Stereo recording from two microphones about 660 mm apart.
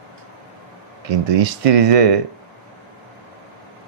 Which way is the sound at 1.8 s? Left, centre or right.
Right.